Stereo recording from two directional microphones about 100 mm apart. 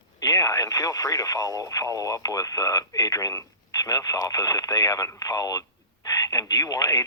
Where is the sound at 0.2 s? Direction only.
35° left (ahead or behind).